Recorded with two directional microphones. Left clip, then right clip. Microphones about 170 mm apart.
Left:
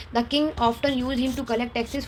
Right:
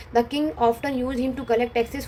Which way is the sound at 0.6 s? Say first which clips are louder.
Right 1 dB; 35° left (ahead or behind).